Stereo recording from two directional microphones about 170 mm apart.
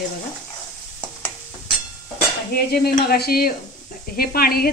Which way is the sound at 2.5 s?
65° left (ahead or behind).